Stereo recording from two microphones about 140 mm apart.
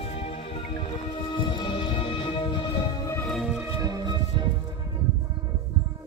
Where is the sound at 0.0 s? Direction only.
45° left (ahead or behind).